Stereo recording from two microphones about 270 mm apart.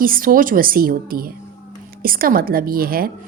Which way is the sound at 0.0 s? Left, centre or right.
Right.